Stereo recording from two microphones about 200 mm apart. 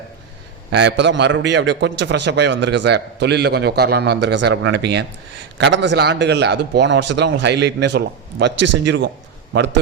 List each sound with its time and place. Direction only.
0.7 s a man's voice: 60° right (ahead or behind)